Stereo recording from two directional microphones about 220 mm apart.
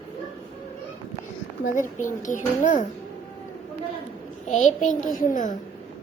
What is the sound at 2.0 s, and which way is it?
Speech, 35° left (ahead or behind).